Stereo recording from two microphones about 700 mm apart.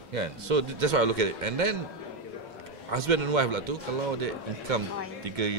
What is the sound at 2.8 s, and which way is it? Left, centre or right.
A man's voice, right.